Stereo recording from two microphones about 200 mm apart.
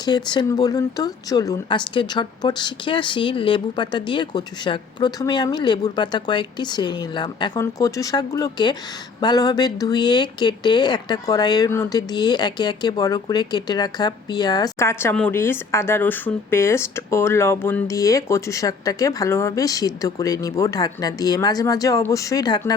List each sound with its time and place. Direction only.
0.0 s speech: 20° left (ahead or behind)